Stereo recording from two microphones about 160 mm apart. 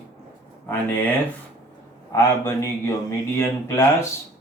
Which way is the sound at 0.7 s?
10° left (ahead or behind).